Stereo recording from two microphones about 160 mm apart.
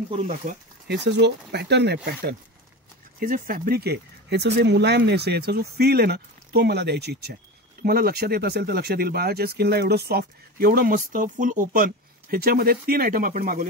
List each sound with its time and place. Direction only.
0.8 s speech: 90° right
3.2 s speech: 60° right (ahead or behind); by 7.3 s 90° right
7.8 s speech: 75° right (ahead or behind); by 13.7 s 55° right (ahead or behind)